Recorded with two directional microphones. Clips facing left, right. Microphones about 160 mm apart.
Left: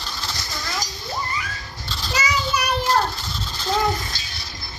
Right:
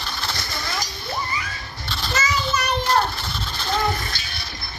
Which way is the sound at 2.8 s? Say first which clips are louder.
Even; 65° right (ahead or behind).